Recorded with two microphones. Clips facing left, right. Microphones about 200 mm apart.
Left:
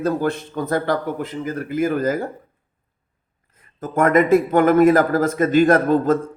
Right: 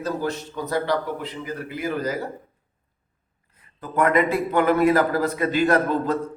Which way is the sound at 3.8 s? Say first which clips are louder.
Left 4 dB; 45° left (ahead or behind).